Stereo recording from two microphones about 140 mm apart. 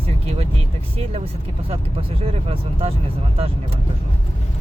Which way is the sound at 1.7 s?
45° right (ahead or behind).